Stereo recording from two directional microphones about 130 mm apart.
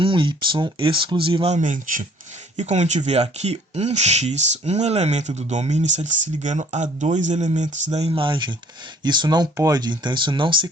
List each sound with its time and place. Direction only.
0.0 s speech: 40° right (ahead or behind)
1.5 s speech: 80° right
2.6 s speech: 60° right (ahead or behind); by 10.7 s 40° right (ahead or behind)